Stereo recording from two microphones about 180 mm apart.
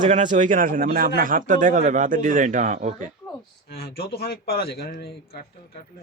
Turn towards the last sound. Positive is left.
turn(degrees=60)  # may be behind; listen again after turning